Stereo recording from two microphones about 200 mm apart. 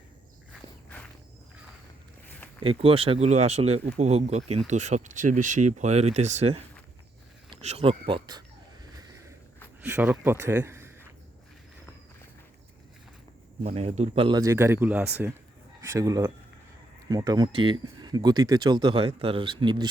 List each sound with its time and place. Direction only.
2.6 s speech: 30° right (ahead or behind)
9.9 s speech: 10° right (ahead or behind)
13.7 s speech: 30° right (ahead or behind)